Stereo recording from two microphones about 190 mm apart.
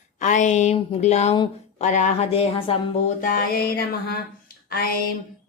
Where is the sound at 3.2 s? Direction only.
55° left (ahead or behind).